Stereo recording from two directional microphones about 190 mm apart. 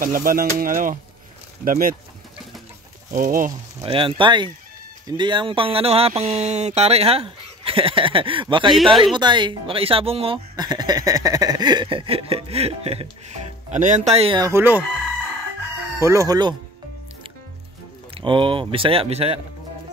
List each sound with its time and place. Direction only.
0.0 s speech: 45° right (ahead or behind)
3.1 s speech: 45° right (ahead or behind)
3.8 s speech: 30° right (ahead or behind)
8.6 s speech: centre (ahead or behind)
9.1 s speech: 25° right (ahead or behind)
14.4 s speech: 10° right (ahead or behind)
16.0 s speech: 15° right (ahead or behind)
18.1 s speech: 25° right (ahead or behind)